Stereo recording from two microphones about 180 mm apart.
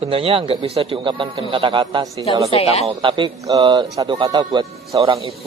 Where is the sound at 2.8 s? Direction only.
25° right (ahead or behind).